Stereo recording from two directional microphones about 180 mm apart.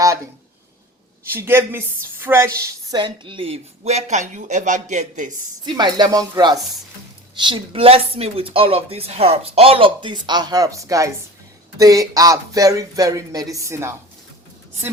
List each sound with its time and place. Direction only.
1.3 s a woman's voice: 15° right (ahead or behind)
3.0 s speech: 30° right (ahead or behind)
5.6 s speech: 25° right (ahead or behind)